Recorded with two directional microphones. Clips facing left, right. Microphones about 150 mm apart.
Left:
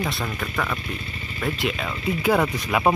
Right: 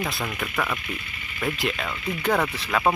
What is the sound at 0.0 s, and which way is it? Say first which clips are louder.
Speech: left 1 dB; centre (ahead or behind).